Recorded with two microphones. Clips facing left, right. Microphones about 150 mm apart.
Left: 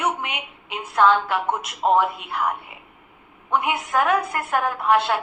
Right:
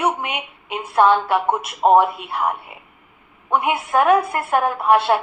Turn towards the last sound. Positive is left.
turn(degrees=-25)  # may be behind; listen again after turning